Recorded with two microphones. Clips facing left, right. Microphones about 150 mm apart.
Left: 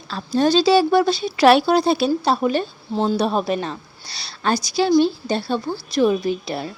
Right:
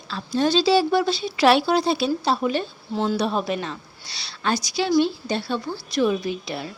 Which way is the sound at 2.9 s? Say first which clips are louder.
Left 3 dB; 30° left (ahead or behind).